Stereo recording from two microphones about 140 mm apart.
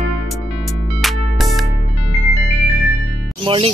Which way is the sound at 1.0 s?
Centre (ahead or behind).